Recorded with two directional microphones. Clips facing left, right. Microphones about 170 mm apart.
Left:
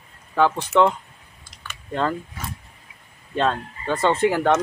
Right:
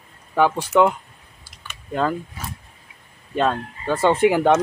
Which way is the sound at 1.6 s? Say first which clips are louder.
Right 2 dB; 10° right (ahead or behind).